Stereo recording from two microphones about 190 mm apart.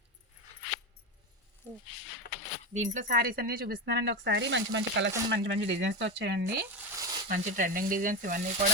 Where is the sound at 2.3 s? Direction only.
65° left (ahead or behind).